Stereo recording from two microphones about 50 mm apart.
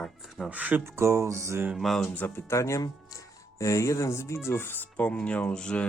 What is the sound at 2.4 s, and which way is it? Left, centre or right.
Speech, left.